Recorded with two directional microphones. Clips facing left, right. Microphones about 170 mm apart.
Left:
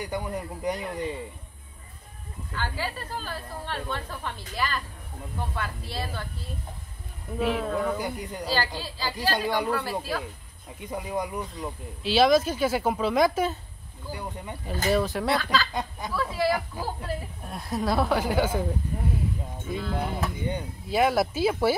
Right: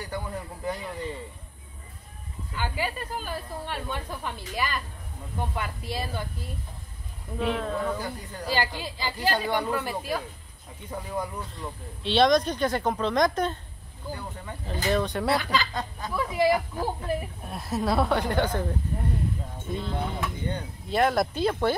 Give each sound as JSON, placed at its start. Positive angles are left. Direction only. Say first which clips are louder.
{"t": 0.0, "sound": "speech", "louder": "left 3 dB", "side_deg": 15}
{"t": 2.5, "sound": "speech", "louder": "right 1 dB", "side_deg": -15}
{"t": 7.3, "sound": "speech", "louder": "left 2 dB", "side_deg": 5}
{"t": 8.5, "sound": "speech", "louder": "right 2 dB", "side_deg": -15}
{"t": 10.9, "sound": "speech", "louder": "left 2 dB", "side_deg": 15}
{"t": 11.6, "sound": "speech", "louder": "left 2 dB", "side_deg": 5}
{"t": 14.9, "sound": "speech", "louder": "left 1 dB", "side_deg": 5}
{"t": 15.3, "sound": "speech", "louder": "left 1 dB", "side_deg": -15}
{"t": 17.4, "sound": "speech", "louder": "even", "side_deg": 0}